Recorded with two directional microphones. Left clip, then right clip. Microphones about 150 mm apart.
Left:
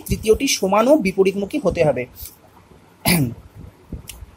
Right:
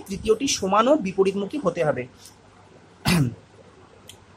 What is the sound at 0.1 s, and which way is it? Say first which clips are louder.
Speech: left 5 dB; 20° left (ahead or behind).